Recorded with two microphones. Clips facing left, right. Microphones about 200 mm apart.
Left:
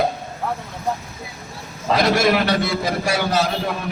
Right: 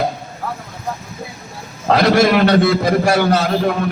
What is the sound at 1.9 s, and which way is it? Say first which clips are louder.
A man's voice: right 4 dB; 60° right (ahead or behind).